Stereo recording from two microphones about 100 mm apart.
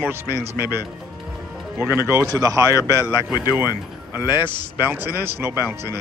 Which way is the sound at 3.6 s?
35° left (ahead or behind).